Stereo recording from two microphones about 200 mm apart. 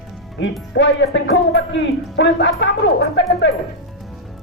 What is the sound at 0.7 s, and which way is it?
Speech, 60° left (ahead or behind).